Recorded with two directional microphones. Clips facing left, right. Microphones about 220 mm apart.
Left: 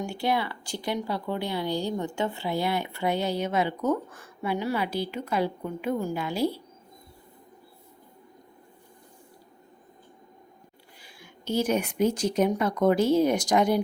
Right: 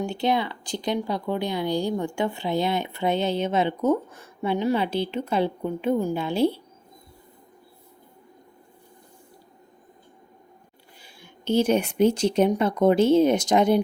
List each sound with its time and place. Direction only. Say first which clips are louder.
0.0 s speech: right 3 dB; 20° right (ahead or behind)
11.0 s speech: right 5 dB; 25° right (ahead or behind)